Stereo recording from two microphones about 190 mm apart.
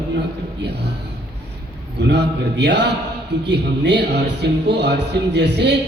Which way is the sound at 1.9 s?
60° right (ahead or behind).